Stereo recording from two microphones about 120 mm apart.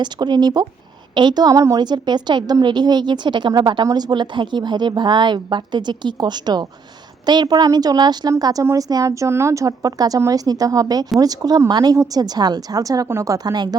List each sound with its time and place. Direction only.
0.0 s a woman's voice: 35° right (ahead or behind)